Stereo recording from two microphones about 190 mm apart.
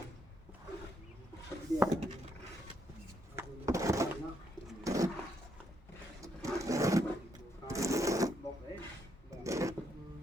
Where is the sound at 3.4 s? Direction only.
15° right (ahead or behind).